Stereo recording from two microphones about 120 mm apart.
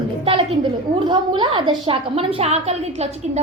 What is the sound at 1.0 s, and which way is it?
A woman's voice, 40° right (ahead or behind).